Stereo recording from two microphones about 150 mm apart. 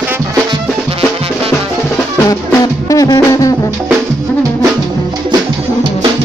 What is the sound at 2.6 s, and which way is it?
Music, 25° left (ahead or behind).